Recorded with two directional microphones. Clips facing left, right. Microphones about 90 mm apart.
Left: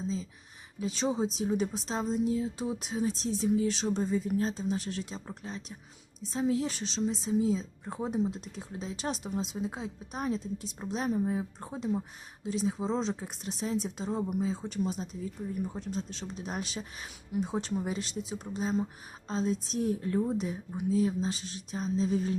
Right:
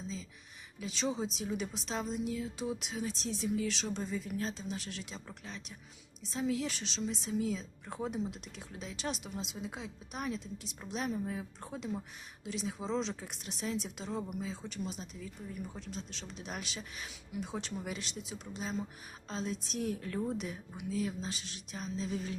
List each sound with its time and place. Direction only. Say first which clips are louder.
0.8 s speech: left 5 dB; 30° left (ahead or behind)